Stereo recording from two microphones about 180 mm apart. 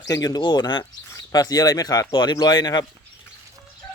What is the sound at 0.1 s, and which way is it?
Speech, 20° left (ahead or behind).